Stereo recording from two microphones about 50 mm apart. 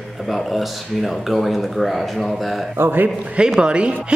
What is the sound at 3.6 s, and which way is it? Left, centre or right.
Speech, right.